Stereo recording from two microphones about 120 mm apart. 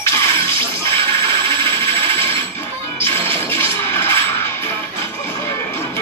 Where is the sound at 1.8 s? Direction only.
20° left (ahead or behind).